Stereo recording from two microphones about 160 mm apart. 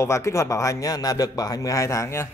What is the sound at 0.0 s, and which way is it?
A man's voice, 15° left (ahead or behind).